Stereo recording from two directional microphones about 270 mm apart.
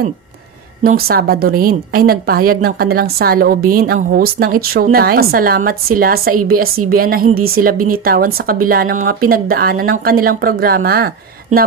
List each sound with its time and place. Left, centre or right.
0.8 s a woman's voice: right